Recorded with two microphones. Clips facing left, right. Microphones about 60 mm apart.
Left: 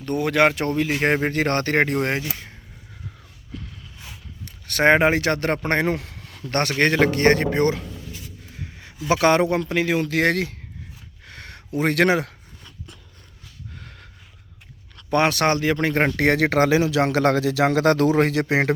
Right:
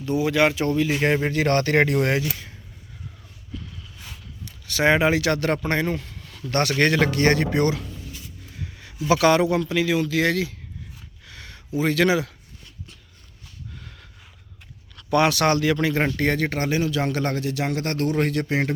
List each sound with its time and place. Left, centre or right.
0.0 s speech: left
0.7 s speech: left
4.4 s speech: left
5.7 s speech: left
6.5 s speech: left
8.5 s a sound: left
9.0 s speech: left
11.3 s a sound: left
13.7 s snort: left
15.1 s speech: left
16.1 s speech: left